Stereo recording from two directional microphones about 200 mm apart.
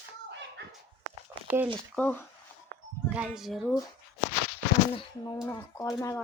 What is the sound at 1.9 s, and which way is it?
Speech, 10° left (ahead or behind).